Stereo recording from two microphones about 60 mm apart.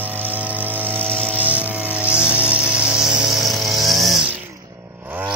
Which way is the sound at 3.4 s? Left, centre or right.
Centre.